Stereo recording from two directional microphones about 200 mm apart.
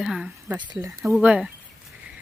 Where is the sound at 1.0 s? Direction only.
5° right (ahead or behind).